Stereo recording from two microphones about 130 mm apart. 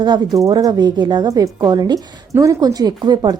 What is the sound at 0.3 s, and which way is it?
A woman's voice, 25° right (ahead or behind).